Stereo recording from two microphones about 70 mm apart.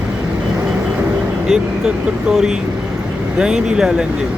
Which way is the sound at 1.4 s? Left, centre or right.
Centre.